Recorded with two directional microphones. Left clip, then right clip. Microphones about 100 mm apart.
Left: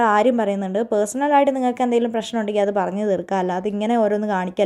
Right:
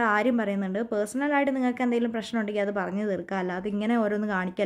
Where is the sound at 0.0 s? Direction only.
25° left (ahead or behind).